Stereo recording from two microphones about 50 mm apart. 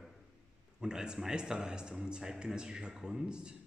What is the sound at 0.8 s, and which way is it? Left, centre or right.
A man's voice, centre.